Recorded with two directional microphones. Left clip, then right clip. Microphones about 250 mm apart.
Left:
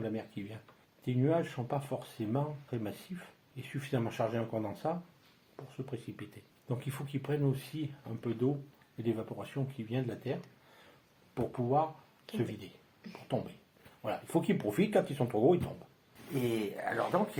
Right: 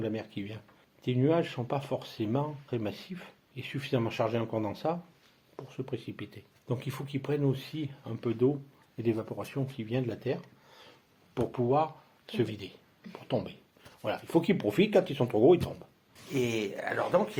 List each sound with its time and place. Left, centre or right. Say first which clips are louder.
0.0 s speech: right 4 dB; right
11.3 s speech: right 4 dB; right
12.3 s speech: right 6 dB; centre
13.1 s speech: right 4 dB; right